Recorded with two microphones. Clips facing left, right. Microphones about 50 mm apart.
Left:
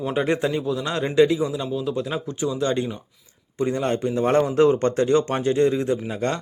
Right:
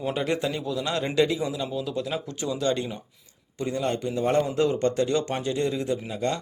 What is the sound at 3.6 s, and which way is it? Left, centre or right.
A man's voice, left.